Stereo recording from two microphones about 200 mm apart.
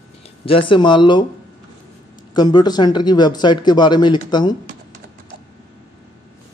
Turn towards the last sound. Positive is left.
turn(degrees=20)  # may be behind; listen again after turning